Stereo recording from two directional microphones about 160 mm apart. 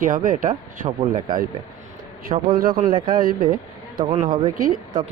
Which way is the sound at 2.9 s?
30° right (ahead or behind).